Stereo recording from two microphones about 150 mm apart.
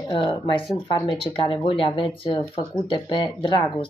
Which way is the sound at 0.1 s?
30° left (ahead or behind).